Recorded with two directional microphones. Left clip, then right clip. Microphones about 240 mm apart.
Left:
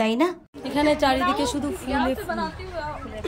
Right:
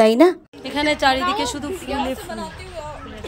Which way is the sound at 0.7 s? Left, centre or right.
Centre.